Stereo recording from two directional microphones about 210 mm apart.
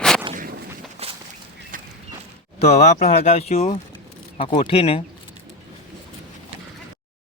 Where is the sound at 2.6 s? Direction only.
30° left (ahead or behind).